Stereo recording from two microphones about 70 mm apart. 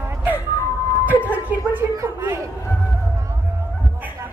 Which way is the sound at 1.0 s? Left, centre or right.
Right.